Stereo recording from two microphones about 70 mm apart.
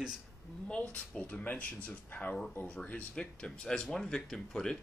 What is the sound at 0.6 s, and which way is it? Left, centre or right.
Speech, centre.